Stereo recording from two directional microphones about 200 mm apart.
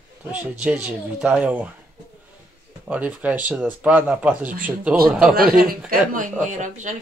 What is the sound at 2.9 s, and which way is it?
Speech, 5° right (ahead or behind).